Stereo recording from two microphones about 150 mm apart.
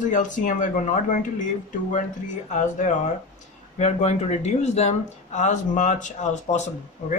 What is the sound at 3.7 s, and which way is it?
Speech, 45° left (ahead or behind).